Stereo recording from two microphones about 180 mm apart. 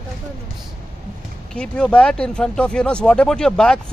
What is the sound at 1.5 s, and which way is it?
Speech, 5° left (ahead or behind).